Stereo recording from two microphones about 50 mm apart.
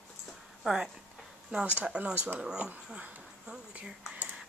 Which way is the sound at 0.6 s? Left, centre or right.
Centre.